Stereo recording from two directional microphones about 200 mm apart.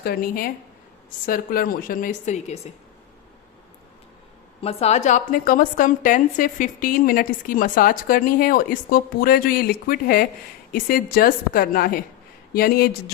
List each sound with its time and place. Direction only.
0.0 s a woman's voice: 50° left (ahead or behind)
4.6 s a woman's voice: 30° left (ahead or behind); by 12.9 s 50° left (ahead or behind)